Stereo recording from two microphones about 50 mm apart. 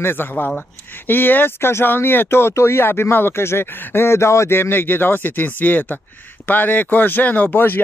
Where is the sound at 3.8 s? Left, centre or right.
Left.